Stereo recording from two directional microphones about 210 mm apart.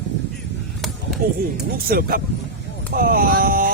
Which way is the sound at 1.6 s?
45° right (ahead or behind).